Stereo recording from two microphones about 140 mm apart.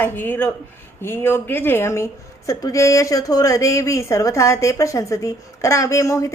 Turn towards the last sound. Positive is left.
turn(degrees=20)  # may be behind; listen again after turning